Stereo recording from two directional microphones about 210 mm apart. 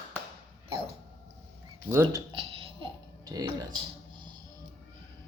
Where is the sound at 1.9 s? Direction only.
10° right (ahead or behind).